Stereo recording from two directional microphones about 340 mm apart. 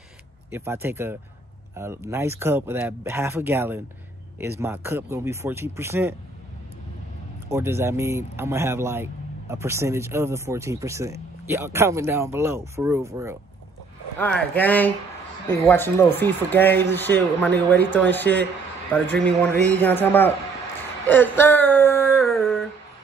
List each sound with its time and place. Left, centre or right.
0.5 s a man's voice: centre
7.4 s a man's voice: centre
14.1 s speech: centre
17.6 s speech: right
18.1 s speech: centre
19.4 s speech: centre
21.1 s a sound: centre